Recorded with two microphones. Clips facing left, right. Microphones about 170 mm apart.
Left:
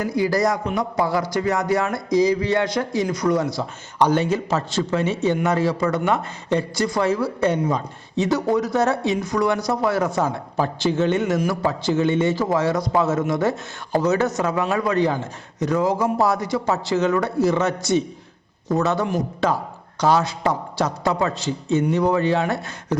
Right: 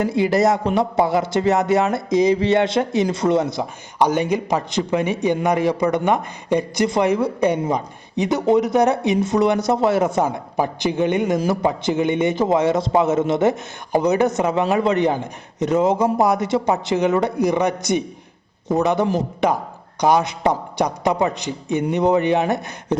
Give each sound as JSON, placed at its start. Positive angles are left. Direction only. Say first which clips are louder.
{"t": 0.0, "sound": "a man's voice", "louder": "right 3 dB", "side_deg": -25}